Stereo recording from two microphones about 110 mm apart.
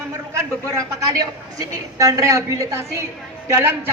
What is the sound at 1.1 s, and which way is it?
A woman's voice, 30° right (ahead or behind).